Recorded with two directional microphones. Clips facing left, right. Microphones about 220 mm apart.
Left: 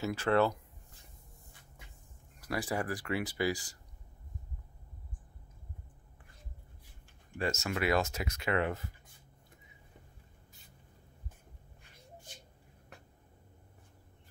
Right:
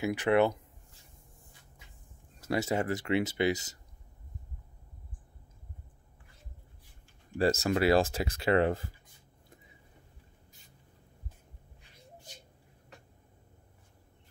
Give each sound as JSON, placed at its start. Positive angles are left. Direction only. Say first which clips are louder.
{"t": 0.0, "sound": "speech", "louder": "right 3 dB", "side_deg": -15}
{"t": 2.4, "sound": "speech", "louder": "right 5 dB", "side_deg": -25}
{"t": 7.3, "sound": "speech", "louder": "right 7 dB", "side_deg": -35}